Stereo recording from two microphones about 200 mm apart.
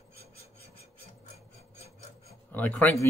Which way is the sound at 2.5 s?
10° left (ahead or behind).